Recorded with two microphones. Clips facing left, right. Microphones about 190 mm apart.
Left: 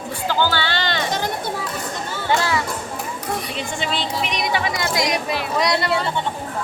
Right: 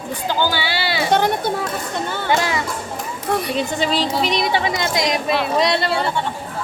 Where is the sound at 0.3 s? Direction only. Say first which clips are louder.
Even; 15° right (ahead or behind).